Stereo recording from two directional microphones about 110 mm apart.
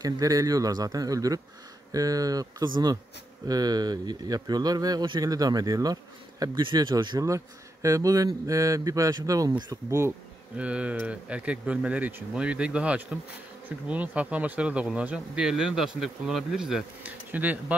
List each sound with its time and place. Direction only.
0.0 s speech: 30° right (ahead or behind)
7.2 s speech: 30° right (ahead or behind)
9.8 s bee: 25° right (ahead or behind)
10.6 s speech: 10° right (ahead or behind)
17.0 s speech: 15° right (ahead or behind)